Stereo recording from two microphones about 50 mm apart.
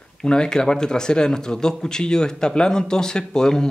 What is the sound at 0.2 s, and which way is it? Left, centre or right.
Speech, centre.